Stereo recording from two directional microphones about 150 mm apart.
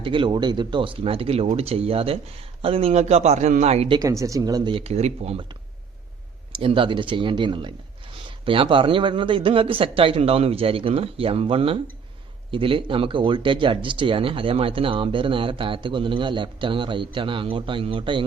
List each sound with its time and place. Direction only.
0.0 s speech: 35° right (ahead or behind)
3.9 s speech: 20° right (ahead or behind)
4.8 s speech: 45° right (ahead or behind)
6.6 s speech: 35° right (ahead or behind)